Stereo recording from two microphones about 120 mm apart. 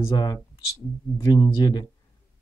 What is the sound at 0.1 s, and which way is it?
Speech, 35° left (ahead or behind).